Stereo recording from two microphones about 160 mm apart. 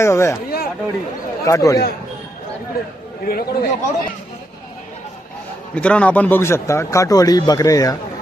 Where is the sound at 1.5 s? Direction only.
20° left (ahead or behind).